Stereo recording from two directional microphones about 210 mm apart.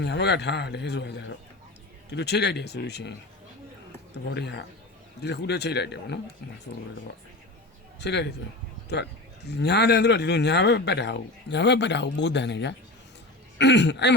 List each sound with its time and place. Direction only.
0.0 s speech: 55° left (ahead or behind)
4.3 s speech: 50° left (ahead or behind)
7.9 s speech: 55° left (ahead or behind)
9.5 s speech: 50° left (ahead or behind)